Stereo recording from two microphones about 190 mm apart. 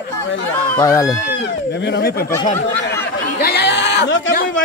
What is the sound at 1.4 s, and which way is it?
Speech, 65° left (ahead or behind).